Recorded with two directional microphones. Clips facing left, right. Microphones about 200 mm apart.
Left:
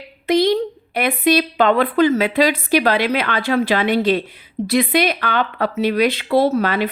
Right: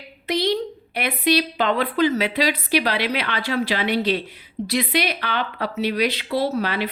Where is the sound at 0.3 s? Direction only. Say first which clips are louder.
Left 6 dB; 50° left (ahead or behind).